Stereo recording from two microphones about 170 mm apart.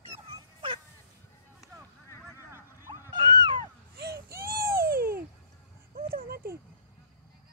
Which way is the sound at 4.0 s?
65° right (ahead or behind).